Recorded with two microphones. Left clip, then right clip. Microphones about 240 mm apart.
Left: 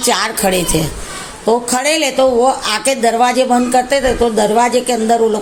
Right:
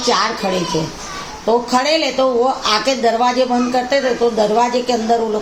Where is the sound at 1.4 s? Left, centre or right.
Left.